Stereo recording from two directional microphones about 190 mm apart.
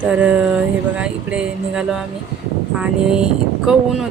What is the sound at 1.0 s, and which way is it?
Speech, 5° right (ahead or behind).